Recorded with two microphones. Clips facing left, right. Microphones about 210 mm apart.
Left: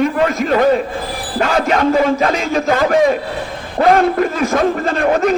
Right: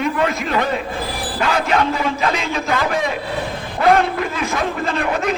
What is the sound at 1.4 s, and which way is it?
A man's voice, 45° left (ahead or behind).